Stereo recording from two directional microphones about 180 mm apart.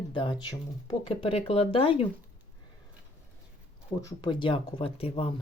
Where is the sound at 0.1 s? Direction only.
25° left (ahead or behind).